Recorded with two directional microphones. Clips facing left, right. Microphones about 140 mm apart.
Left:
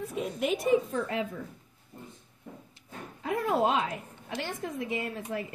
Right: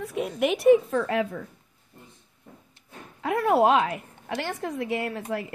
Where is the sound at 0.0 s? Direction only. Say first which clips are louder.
Right 5 dB; 75° right (ahead or behind).